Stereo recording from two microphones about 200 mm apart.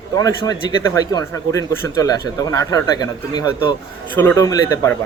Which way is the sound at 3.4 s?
90° right.